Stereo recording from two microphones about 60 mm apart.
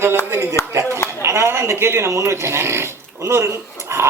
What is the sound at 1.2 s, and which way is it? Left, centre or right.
A man's voice, right.